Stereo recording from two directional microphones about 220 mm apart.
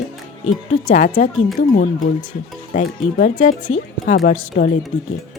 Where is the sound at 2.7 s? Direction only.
35° left (ahead or behind).